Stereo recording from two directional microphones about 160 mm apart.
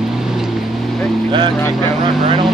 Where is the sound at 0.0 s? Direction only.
5° right (ahead or behind).